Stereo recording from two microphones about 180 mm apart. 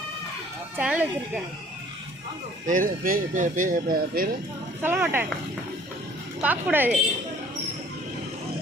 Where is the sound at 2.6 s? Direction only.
50° right (ahead or behind).